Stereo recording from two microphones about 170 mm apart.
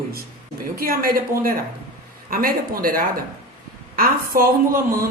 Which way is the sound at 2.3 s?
60° right (ahead or behind).